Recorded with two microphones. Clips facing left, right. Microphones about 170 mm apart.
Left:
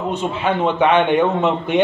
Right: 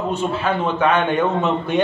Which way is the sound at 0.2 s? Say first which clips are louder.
Left 4 dB; 15° left (ahead or behind).